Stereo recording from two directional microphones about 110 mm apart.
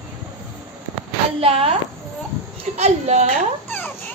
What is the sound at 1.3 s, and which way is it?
Speech, 65° right (ahead or behind).